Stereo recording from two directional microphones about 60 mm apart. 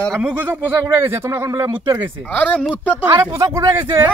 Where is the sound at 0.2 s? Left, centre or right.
Right.